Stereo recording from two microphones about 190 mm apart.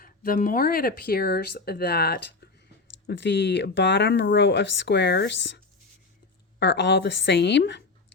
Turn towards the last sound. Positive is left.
turn(degrees=65)  # may be behind; listen again after turning